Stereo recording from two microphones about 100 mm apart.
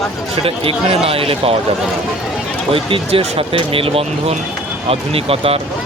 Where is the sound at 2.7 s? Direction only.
65° right (ahead or behind).